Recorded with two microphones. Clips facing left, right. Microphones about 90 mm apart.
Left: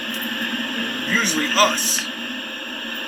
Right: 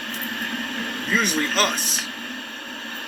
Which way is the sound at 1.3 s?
50° left (ahead or behind).